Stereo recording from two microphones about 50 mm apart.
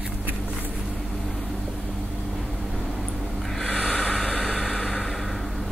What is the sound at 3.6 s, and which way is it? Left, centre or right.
Snort, centre.